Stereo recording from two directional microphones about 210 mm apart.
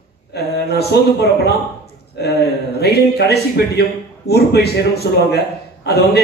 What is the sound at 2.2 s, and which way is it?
A man's voice, 50° left (ahead or behind).